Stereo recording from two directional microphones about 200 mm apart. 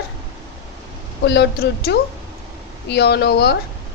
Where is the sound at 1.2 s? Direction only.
60° left (ahead or behind).